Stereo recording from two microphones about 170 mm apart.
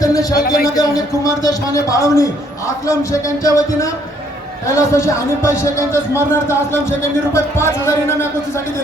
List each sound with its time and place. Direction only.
0.0 s a sound: 20° left (ahead or behind)
0.3 s a man's voice: 65° left (ahead or behind)
0.7 s speech: 20° left (ahead or behind)